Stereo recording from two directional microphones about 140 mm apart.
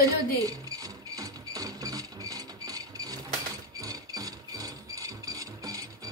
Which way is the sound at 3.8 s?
25° right (ahead or behind).